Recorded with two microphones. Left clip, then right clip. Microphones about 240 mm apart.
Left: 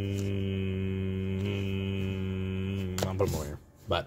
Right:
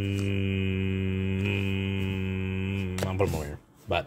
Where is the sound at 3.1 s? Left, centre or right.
Centre.